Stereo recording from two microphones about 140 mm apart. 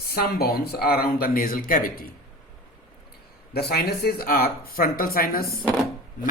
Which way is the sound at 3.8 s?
90° left.